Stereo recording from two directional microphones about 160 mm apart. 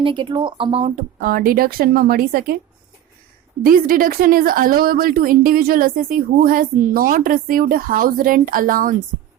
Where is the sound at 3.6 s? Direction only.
60° right (ahead or behind).